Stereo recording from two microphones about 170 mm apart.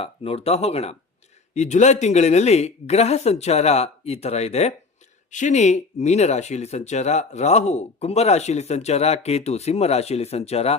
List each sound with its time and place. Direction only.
0.0 s speech: 35° left (ahead or behind)